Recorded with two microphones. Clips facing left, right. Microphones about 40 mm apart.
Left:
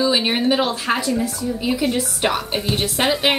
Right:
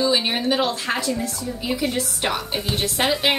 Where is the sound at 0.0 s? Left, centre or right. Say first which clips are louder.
Left 2 dB; centre.